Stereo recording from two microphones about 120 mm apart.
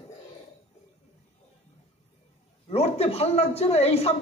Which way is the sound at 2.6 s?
55° left (ahead or behind).